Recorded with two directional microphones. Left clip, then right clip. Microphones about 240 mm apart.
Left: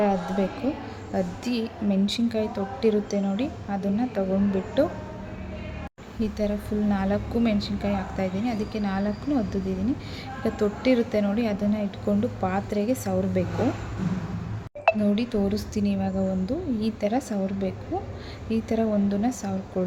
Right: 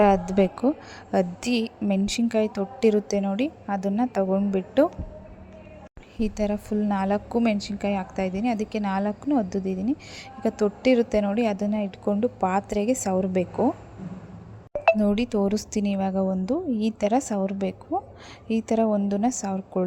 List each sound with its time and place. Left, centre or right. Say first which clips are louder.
0.0 s speech: right 5 dB; right
6.1 s speech: right 1 dB; right
15.0 s speech: right 2 dB; right